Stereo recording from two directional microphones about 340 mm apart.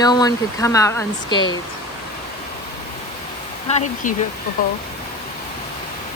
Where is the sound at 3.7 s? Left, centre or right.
Centre.